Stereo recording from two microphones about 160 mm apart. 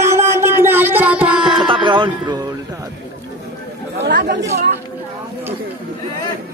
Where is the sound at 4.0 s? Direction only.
90° right.